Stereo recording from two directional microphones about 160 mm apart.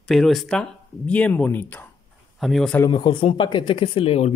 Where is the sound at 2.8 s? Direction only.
25° left (ahead or behind).